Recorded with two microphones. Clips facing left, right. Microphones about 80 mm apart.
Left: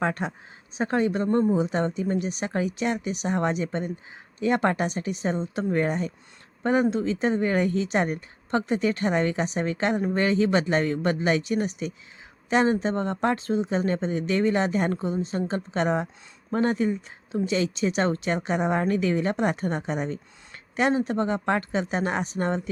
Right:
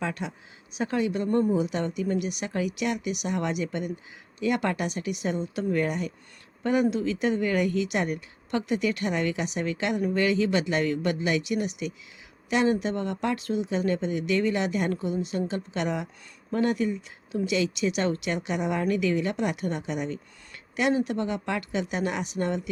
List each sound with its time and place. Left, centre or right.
0.0 s speech: left